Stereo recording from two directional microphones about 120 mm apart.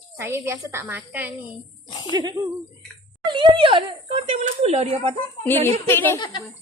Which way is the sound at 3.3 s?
40° right (ahead or behind).